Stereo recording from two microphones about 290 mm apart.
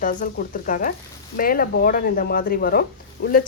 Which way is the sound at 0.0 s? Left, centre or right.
Left.